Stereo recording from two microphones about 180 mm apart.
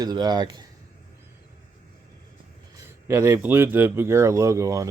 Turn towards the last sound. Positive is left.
turn(degrees=-15)  # may be behind; listen again after turning